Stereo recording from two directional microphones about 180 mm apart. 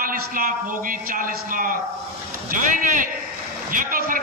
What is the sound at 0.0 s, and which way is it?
A man's voice, 50° right (ahead or behind).